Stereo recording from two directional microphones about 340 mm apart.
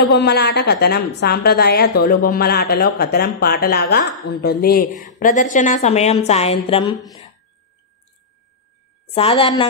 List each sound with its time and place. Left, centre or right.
0.1 s a woman's voice: left
9.1 s a woman's voice: centre